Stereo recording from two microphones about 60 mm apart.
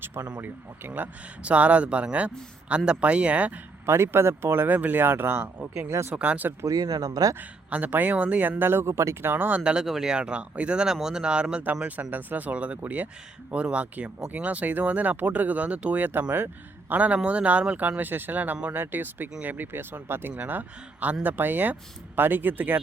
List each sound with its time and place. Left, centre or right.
0.3 s speech: right
3.8 s speech: right
5.9 s speech: right
6.1 s speech: right
6.7 s speech: right
7.7 s speech: right
9.3 s speech: right
9.6 s speech: centre
9.8 s speech: centre
12.1 s speech: right
18.7 s speech: right
20.3 s speech: right